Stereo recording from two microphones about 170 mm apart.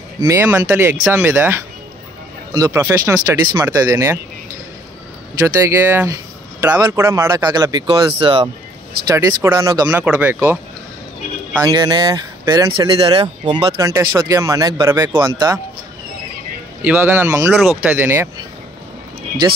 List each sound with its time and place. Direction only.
0.2 s speech: 15° right (ahead or behind)
5.6 s speech: 15° right (ahead or behind); by 8.5 s 30° right (ahead or behind)
9.0 s speech: 20° right (ahead or behind)
11.6 s speech: 25° right (ahead or behind)
16.8 s speech: 10° right (ahead or behind)
17.6 s speech: centre (ahead or behind)
17.9 s speech: 10° right (ahead or behind)